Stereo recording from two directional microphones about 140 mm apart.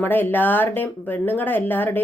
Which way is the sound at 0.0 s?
15° left (ahead or behind).